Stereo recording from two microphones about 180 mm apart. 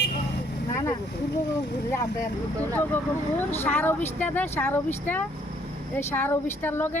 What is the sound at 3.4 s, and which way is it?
Speech, 10° left (ahead or behind).